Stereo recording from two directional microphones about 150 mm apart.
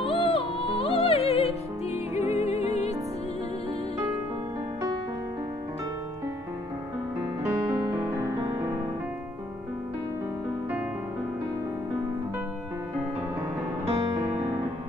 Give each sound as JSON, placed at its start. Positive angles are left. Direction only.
{"t": 0.0, "sound": "music", "side_deg": 35}
{"t": 7.9, "sound": "music", "side_deg": -15}